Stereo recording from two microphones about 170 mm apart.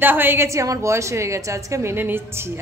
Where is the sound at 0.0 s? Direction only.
10° right (ahead or behind).